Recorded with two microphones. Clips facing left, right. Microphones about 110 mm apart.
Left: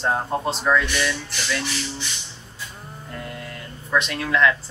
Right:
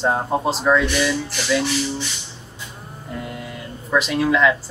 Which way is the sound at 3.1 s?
5° right (ahead or behind).